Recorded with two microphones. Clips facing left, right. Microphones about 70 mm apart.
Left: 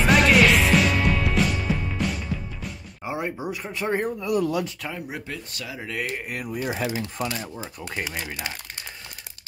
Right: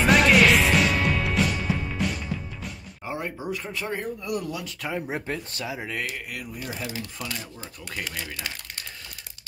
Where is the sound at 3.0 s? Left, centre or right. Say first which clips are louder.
Left 2 dB; centre.